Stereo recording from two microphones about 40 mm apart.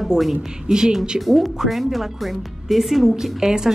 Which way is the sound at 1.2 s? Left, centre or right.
Centre.